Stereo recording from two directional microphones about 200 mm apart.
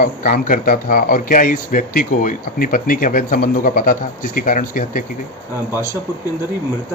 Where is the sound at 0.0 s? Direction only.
45° left (ahead or behind).